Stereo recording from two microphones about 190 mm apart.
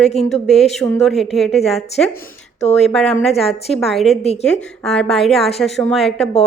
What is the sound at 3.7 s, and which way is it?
Speech, centre (ahead or behind).